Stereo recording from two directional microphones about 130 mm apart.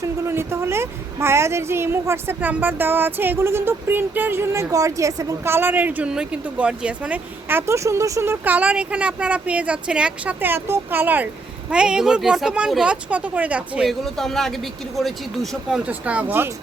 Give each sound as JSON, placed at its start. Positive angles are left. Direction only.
{"t": 0.0, "sound": "a woman's voice", "side_deg": -20}
{"t": 15.9, "sound": "a woman's voice", "side_deg": -10}